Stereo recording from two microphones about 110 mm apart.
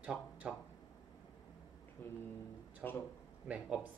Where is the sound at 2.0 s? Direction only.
20° left (ahead or behind).